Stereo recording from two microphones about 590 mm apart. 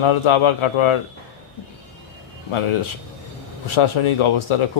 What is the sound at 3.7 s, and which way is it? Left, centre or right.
Speech, left.